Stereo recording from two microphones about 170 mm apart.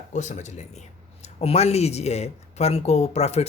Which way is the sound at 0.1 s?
45° left (ahead or behind).